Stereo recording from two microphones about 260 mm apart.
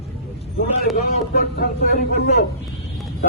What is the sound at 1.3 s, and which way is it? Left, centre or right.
Speech, left.